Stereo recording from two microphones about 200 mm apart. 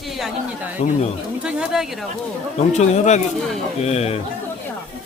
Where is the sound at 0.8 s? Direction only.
35° left (ahead or behind).